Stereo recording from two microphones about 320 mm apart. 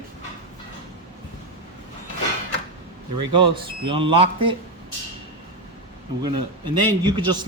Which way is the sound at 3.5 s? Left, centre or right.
Centre.